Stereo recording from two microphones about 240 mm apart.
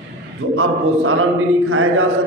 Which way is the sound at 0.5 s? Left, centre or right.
Right.